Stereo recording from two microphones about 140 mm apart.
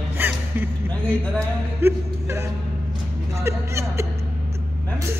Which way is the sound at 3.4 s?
20° right (ahead or behind).